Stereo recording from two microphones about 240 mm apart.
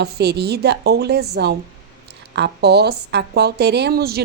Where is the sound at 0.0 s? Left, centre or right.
Right.